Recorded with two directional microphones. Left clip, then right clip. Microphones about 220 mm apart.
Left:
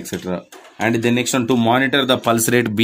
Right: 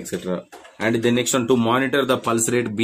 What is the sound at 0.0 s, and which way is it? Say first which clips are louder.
Speech: left 1 dB; 30° left (ahead or behind).